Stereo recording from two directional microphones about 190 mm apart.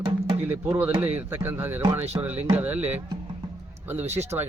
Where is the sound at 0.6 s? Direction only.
10° right (ahead or behind).